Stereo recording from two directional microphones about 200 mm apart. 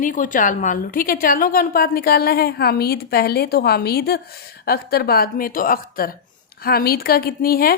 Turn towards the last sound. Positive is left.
turn(degrees=50)  # may be behind; listen again after turning